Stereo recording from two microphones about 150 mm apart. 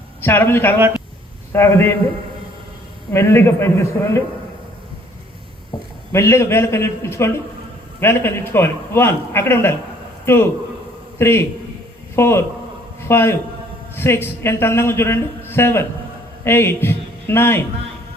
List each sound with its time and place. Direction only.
0.2 s a man's voice: 15° left (ahead or behind)
3.1 s a man's voice: 15° left (ahead or behind)
6.1 s a man's voice: 15° left (ahead or behind)